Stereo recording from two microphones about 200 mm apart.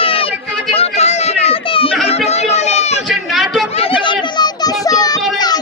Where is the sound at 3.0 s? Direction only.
Centre (ahead or behind).